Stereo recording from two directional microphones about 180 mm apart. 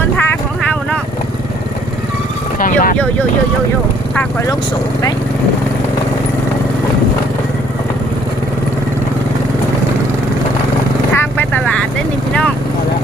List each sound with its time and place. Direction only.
0.2 s vehicle: 10° left (ahead or behind)
2.6 s speech: 50° left (ahead or behind)
4.1 s speech: 10° left (ahead or behind)
11.1 s vehicle: 10° left (ahead or behind)